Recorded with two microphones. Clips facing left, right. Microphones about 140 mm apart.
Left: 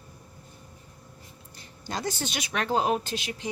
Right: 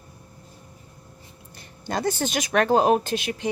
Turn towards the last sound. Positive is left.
turn(degrees=-55)  # may be behind; listen again after turning